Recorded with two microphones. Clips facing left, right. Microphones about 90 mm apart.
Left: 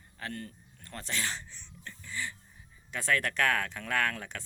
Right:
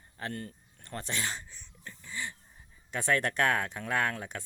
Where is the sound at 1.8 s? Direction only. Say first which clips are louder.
Left 1 dB; 20° right (ahead or behind).